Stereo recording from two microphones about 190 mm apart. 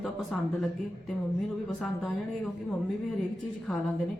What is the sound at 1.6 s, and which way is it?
Speech, centre (ahead or behind).